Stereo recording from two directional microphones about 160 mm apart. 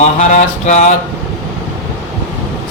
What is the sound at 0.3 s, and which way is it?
Speech, 50° left (ahead or behind).